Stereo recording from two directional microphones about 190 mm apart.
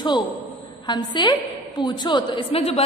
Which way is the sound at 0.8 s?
25° left (ahead or behind).